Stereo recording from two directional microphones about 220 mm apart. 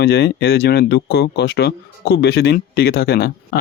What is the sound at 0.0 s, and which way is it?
Speech, 45° left (ahead or behind).